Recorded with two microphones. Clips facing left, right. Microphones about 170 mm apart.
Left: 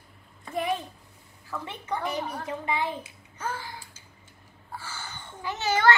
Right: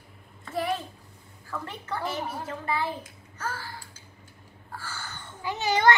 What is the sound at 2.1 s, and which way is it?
Speech, 5° right (ahead or behind).